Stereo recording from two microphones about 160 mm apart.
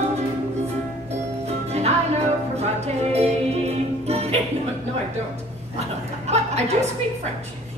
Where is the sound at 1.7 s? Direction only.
40° right (ahead or behind).